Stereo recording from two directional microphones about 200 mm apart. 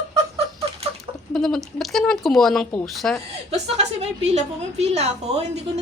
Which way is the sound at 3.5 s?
30° right (ahead or behind).